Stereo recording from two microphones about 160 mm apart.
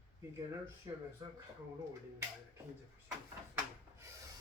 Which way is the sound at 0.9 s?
30° right (ahead or behind).